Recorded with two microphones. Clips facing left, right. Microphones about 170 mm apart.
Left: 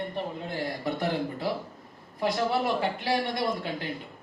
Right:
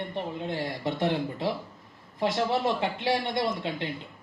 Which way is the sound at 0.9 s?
25° right (ahead or behind).